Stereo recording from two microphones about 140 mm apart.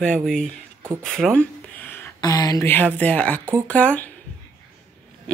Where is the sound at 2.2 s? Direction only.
25° left (ahead or behind).